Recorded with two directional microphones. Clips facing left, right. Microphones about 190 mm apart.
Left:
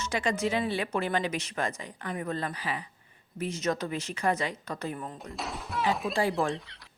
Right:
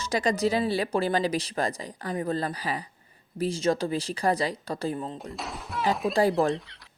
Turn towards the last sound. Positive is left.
turn(degrees=-40)  # may be behind; listen again after turning